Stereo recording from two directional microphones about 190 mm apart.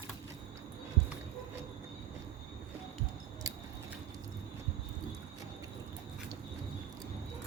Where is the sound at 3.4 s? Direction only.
20° right (ahead or behind).